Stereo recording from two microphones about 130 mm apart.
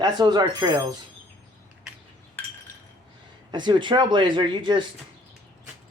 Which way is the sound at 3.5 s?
35° right (ahead or behind).